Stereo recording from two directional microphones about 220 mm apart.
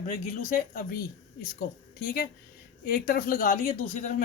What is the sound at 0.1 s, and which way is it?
Speech, 40° left (ahead or behind).